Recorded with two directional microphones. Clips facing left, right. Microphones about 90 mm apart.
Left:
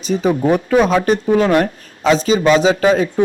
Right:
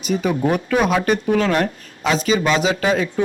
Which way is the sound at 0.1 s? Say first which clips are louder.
Left 4 dB; 30° left (ahead or behind).